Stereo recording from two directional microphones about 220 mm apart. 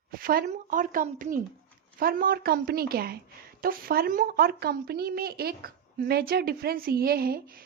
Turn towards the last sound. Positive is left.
turn(degrees=-40)  # may be behind; listen again after turning